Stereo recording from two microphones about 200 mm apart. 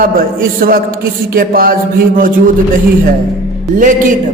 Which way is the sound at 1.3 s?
45° right (ahead or behind).